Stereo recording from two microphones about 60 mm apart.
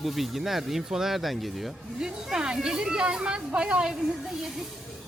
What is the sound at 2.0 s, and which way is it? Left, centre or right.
Speech, centre.